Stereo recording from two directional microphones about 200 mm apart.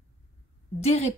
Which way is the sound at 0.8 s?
35° left (ahead or behind).